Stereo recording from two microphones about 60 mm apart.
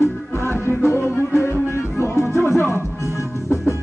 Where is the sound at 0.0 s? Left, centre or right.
Left.